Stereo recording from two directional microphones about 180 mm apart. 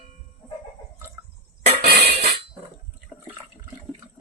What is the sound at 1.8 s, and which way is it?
Music, 60° right (ahead or behind).